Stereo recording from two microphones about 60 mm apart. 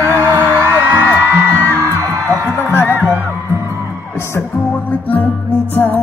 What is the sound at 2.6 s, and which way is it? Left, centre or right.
Music, left.